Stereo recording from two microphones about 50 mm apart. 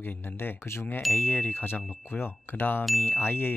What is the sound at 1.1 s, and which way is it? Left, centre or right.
Speech, left.